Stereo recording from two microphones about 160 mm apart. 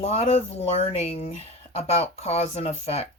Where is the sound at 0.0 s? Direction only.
40° left (ahead or behind).